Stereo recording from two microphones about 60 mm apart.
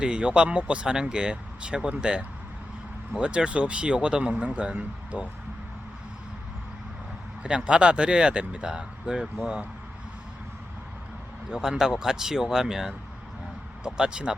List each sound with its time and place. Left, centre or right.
0.0 s speech: centre
7.4 s speech: centre
9.2 s speech: centre
11.5 s speech: centre